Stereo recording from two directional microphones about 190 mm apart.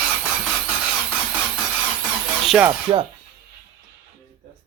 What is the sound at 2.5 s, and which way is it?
Speech, 5° right (ahead or behind).